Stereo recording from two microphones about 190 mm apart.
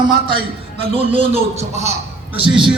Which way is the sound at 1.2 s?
35° right (ahead or behind).